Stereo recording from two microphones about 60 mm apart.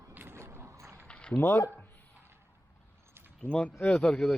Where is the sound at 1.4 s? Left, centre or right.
Left.